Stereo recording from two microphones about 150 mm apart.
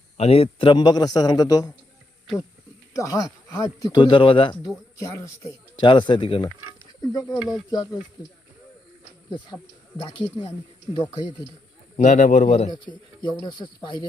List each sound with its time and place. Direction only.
0.2 s speech: 40° left (ahead or behind); by 1.7 s 25° left (ahead or behind)
2.9 s speech: 20° left (ahead or behind)
4.6 s speech: 20° left (ahead or behind)
5.8 s speech: 30° left (ahead or behind)
7.0 s speech: 25° left (ahead or behind)
10.0 s speech: 30° left (ahead or behind)
11.9 s a man's voice: 55° left (ahead or behind)
12.7 s speech: 30° left (ahead or behind)